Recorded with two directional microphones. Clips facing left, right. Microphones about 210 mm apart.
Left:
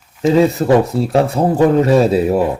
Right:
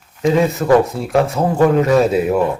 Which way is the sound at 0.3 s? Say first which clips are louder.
Left 3 dB; 25° left (ahead or behind).